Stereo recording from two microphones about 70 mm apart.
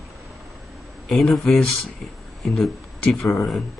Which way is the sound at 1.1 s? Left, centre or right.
Centre.